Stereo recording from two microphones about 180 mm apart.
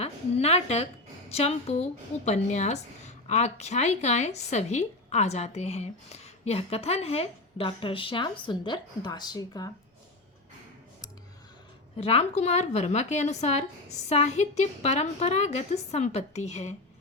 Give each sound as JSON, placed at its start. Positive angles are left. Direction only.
{"t": 0.0, "sound": "a woman's voice", "side_deg": 35}
{"t": 11.9, "sound": "a woman's voice", "side_deg": 35}